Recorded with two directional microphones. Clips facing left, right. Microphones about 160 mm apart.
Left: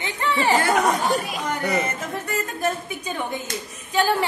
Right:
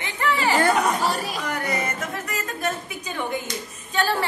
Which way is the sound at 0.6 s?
35° right (ahead or behind).